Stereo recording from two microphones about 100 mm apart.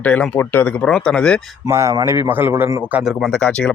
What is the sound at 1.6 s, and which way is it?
A man's voice, 30° right (ahead or behind).